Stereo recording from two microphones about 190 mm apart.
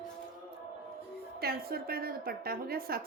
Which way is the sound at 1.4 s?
55° right (ahead or behind).